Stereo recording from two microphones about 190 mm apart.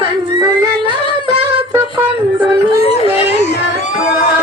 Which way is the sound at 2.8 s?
30° left (ahead or behind).